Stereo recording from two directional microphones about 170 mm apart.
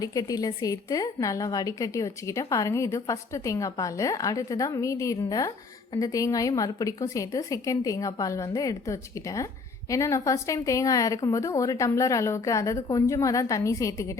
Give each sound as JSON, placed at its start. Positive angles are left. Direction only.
{"t": 0.0, "sound": "a woman's voice", "side_deg": 20}